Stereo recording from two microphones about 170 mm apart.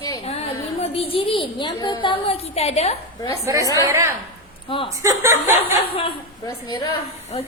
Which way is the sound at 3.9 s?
15° right (ahead or behind).